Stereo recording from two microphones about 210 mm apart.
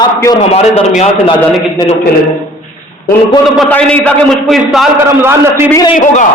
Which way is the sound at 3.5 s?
5° left (ahead or behind).